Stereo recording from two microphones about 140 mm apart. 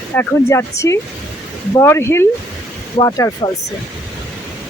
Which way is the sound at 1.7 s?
20° left (ahead or behind).